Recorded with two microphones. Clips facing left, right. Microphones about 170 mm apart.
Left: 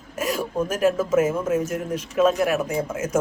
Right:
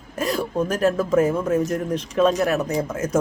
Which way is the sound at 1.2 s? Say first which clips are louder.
Right 2 dB; 35° right (ahead or behind).